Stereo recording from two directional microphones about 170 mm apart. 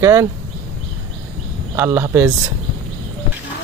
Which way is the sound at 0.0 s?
15° right (ahead or behind).